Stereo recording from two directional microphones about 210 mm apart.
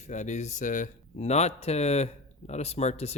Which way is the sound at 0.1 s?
35° left (ahead or behind).